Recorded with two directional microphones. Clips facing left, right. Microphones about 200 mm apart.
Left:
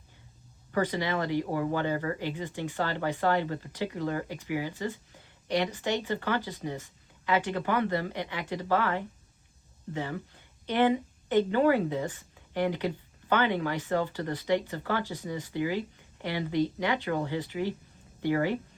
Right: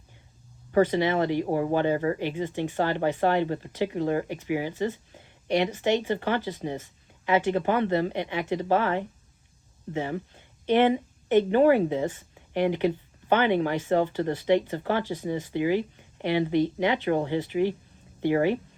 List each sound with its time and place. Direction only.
0.7 s speech: 25° right (ahead or behind)
10.7 s a woman's voice: 20° right (ahead or behind)